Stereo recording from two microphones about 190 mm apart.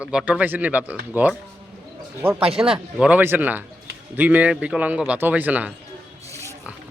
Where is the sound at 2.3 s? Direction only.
30° right (ahead or behind).